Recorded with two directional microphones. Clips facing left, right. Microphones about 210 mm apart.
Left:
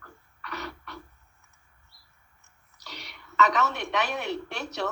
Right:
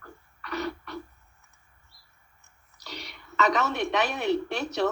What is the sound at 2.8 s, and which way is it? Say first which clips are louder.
A woman's voice: right 4 dB; 30° right (ahead or behind).